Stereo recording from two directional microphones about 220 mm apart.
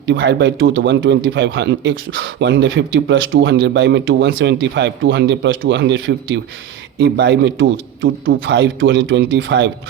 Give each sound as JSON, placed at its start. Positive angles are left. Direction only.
{"t": 0.1, "sound": "speech", "side_deg": -55}